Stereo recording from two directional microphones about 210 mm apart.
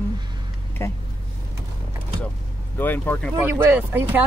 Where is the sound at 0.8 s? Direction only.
10° left (ahead or behind).